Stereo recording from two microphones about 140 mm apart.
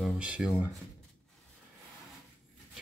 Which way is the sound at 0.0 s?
5° right (ahead or behind).